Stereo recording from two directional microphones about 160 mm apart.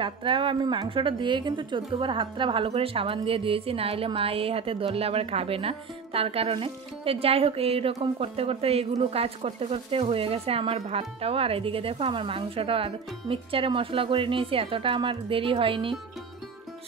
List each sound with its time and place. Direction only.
0.0 s a woman's voice: 30° right (ahead or behind)